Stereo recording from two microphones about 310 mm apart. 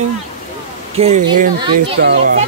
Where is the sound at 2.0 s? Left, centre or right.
Right.